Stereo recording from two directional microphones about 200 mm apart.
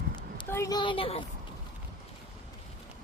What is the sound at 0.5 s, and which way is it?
Speech, 15° left (ahead or behind).